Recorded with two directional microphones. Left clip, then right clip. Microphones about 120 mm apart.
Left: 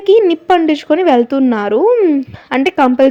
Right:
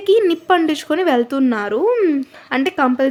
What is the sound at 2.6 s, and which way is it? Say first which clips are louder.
Speech: left 7 dB; 35° left (ahead or behind).